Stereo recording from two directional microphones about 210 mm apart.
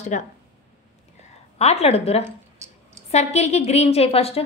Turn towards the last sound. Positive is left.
turn(degrees=30)  # may be behind; listen again after turning